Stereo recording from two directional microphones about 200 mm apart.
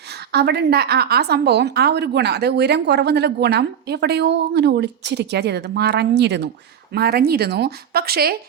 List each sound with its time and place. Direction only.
0.1 s a woman's voice: 55° right (ahead or behind)